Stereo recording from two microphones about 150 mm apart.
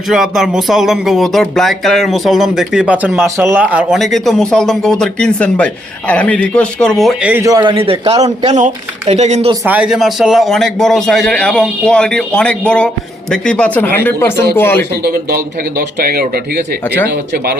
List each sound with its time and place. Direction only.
0.1 s speech: centre (ahead or behind)
7.4 s a man's voice: 25° right (ahead or behind); by 9.5 s 50° right (ahead or behind)
9.6 s speech: 10° right (ahead or behind); by 14.8 s 15° left (ahead or behind)
16.0 s speech: 90° right